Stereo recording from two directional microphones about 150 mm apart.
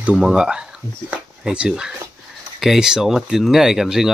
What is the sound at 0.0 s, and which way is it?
Speech, 5° right (ahead or behind).